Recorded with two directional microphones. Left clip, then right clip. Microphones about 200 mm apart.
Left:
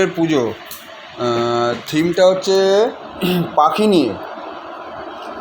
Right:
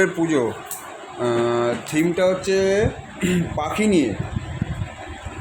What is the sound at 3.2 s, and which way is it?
Speech, 20° right (ahead or behind).